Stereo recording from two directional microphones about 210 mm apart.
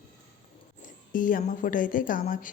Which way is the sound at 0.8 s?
40° left (ahead or behind).